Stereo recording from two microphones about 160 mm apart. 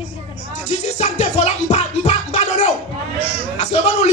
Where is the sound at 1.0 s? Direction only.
45° left (ahead or behind).